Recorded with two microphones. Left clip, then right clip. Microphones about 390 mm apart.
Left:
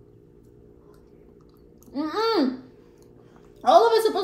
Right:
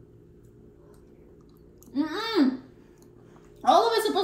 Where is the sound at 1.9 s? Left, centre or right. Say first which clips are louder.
Left 4 dB; centre.